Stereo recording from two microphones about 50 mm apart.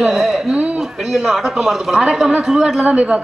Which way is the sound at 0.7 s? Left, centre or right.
Centre.